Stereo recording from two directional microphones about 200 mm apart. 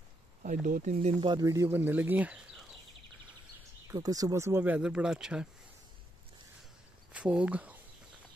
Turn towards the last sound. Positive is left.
turn(degrees=-5)  # may be behind; listen again after turning